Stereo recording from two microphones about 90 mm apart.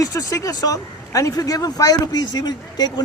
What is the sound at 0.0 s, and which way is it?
Speech, 40° left (ahead or behind).